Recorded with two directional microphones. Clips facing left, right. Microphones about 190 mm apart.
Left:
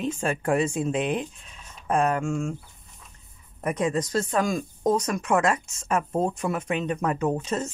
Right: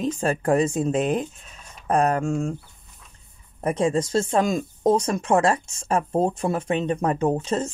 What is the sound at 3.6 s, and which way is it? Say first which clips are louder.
Speech: right 3 dB; 30° right (ahead or behind).